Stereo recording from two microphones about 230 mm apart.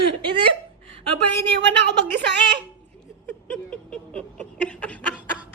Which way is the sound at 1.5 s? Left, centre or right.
Right.